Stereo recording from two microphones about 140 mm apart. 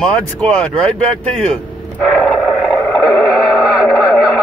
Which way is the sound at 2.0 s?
Centre (ahead or behind).